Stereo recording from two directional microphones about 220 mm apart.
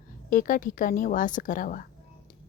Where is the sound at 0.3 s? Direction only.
40° left (ahead or behind).